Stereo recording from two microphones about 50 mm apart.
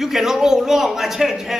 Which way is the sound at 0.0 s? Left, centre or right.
Centre.